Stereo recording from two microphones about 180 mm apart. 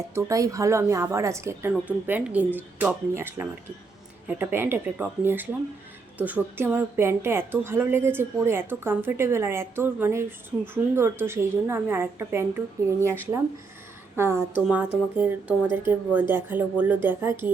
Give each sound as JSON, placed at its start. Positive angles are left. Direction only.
{"t": 0.1, "sound": "a woman's voice", "side_deg": -15}